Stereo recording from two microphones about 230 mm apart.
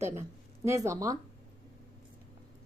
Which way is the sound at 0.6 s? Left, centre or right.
Centre.